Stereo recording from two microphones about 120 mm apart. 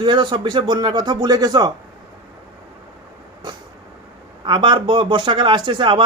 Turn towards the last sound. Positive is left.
turn(degrees=-45)  # may be behind; listen again after turning